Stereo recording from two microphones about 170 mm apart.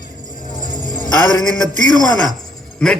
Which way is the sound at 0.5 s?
55° left (ahead or behind).